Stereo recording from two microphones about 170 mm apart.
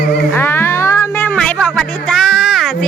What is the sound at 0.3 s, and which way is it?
Music, 15° left (ahead or behind).